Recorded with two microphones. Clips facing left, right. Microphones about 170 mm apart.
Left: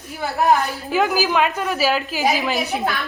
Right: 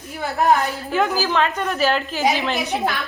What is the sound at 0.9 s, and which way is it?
A woman's voice, 5° left (ahead or behind).